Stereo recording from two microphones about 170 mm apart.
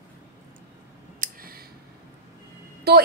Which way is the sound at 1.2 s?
50° right (ahead or behind).